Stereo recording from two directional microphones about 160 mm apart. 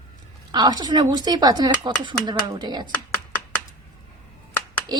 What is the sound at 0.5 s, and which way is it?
Speech, 25° right (ahead or behind).